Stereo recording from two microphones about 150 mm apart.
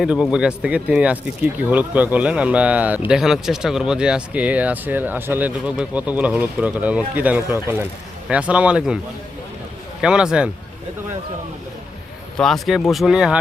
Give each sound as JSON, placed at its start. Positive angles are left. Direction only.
{"t": 0.0, "sound": "speech", "side_deg": -5}
{"t": 10.0, "sound": "speech", "side_deg": -5}
{"t": 12.4, "sound": "speech", "side_deg": 0}